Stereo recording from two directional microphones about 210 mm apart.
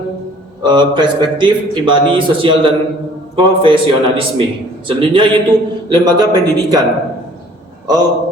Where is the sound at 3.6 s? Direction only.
25° right (ahead or behind).